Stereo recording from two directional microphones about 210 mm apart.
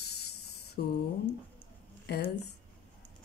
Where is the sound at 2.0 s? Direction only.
50° left (ahead or behind).